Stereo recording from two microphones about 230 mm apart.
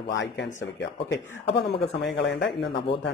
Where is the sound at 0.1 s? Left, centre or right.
Left.